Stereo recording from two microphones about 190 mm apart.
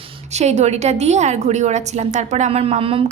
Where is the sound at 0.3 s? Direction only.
35° right (ahead or behind).